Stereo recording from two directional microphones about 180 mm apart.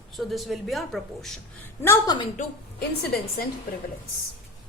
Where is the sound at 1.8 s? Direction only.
20° left (ahead or behind).